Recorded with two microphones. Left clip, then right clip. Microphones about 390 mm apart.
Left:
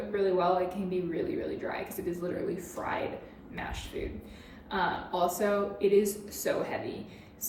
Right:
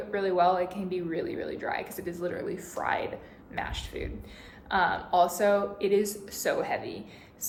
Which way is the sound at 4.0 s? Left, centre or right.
Right.